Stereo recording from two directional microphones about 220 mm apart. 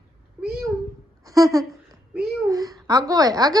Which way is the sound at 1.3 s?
15° right (ahead or behind).